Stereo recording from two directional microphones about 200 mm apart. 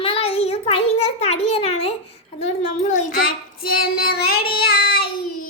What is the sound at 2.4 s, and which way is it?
Child singing, 35° left (ahead or behind).